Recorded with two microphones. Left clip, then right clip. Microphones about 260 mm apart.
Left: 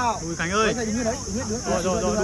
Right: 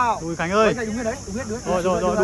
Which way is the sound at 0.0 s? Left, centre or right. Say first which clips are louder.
Right 3 dB; centre.